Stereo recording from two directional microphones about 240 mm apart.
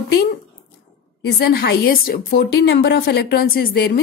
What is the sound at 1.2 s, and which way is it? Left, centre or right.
A woman's voice, left.